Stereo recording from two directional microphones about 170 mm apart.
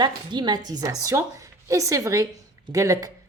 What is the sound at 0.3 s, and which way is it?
A woman's voice, 25° right (ahead or behind).